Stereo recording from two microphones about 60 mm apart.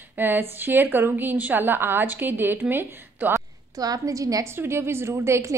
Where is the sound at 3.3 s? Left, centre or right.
Right.